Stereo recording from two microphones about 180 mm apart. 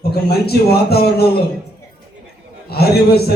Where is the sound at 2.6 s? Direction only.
60° left (ahead or behind).